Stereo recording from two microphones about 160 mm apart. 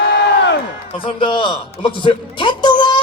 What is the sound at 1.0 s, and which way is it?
Speech, 35° left (ahead or behind).